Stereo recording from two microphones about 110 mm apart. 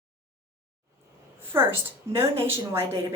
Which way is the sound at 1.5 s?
20° right (ahead or behind).